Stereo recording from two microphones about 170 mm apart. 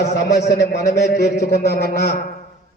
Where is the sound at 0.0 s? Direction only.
75° left (ahead or behind).